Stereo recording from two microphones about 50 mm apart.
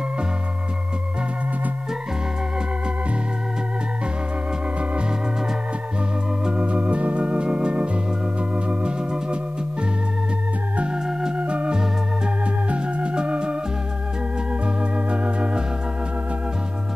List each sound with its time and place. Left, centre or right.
6.4 s organ: right
11.1 s organ: centre
11.3 s organ: right
14.8 s organ: right